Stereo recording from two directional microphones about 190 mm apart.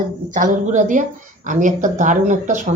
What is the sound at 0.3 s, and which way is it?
Speech, 40° right (ahead or behind).